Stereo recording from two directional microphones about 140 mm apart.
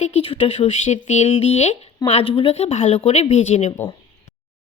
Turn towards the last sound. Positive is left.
turn(degrees=55)  # may be behind; listen again after turning